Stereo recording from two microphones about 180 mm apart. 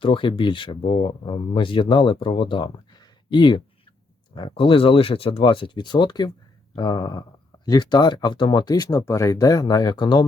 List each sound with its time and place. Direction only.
0.0 s speech: 30° left (ahead or behind)